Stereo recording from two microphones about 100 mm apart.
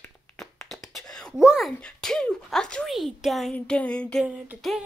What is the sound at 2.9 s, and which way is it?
Beatboxing, centre (ahead or behind).